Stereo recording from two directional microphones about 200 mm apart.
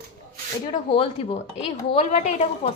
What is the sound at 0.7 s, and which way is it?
A woman's voice, 30° left (ahead or behind).